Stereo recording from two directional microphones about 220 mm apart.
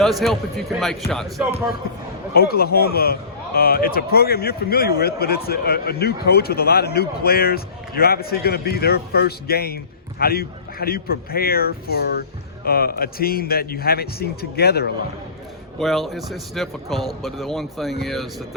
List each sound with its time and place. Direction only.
0.0 s speech: centre (ahead or behind)
2.3 s a man's voice: 45° left (ahead or behind)
15.8 s speech: centre (ahead or behind)